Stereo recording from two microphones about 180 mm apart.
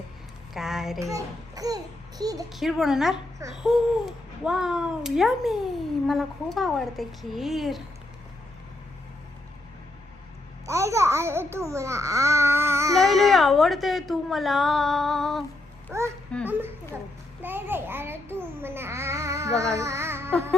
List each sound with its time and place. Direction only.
0.5 s child singing: centre (ahead or behind)
0.9 s a child's voice: 15° right (ahead or behind)
2.5 s a woman's voice: centre (ahead or behind)
10.7 s speech: 15° right (ahead or behind)
13.0 s a woman's voice: centre (ahead or behind)
15.9 s speech: 15° right (ahead or behind)
17.4 s babbling: 10° right (ahead or behind)